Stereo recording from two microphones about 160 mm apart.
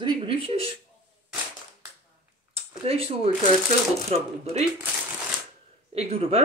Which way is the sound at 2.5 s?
40° right (ahead or behind).